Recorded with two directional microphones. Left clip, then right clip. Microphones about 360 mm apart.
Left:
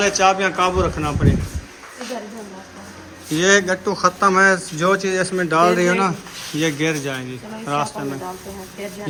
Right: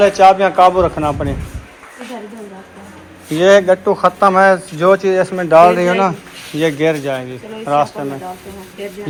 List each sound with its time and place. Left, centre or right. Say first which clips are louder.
0.0 s speech: right 7 dB; centre
3.3 s speech: right 7 dB; centre